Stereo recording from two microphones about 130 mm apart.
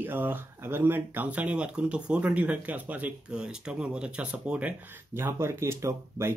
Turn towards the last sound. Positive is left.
turn(degrees=-20)  # may be behind; listen again after turning